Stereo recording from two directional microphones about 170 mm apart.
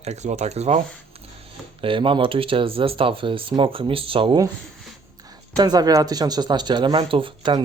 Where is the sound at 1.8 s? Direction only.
30° right (ahead or behind).